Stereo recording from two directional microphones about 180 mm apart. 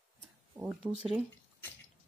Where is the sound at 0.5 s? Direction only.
5° right (ahead or behind).